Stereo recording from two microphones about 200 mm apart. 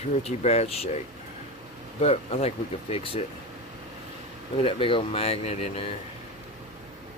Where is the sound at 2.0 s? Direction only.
30° left (ahead or behind).